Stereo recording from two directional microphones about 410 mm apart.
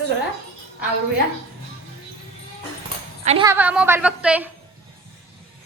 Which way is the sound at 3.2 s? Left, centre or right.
Centre.